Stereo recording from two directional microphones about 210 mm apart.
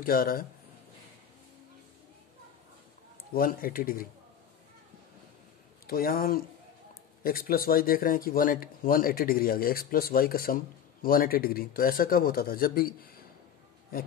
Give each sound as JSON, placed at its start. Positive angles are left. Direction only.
{"t": 0.0, "sound": "speech", "side_deg": 45}
{"t": 3.3, "sound": "speech", "side_deg": 45}
{"t": 5.9, "sound": "speech", "side_deg": 45}